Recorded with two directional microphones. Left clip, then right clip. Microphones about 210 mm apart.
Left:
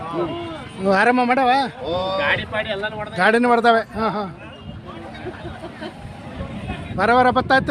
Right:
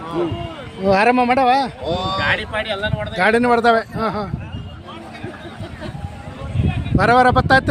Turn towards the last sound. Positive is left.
turn(degrees=-10)  # may be behind; listen again after turning